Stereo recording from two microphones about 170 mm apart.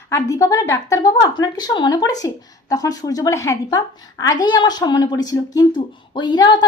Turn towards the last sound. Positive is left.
turn(degrees=25)  # may be behind; listen again after turning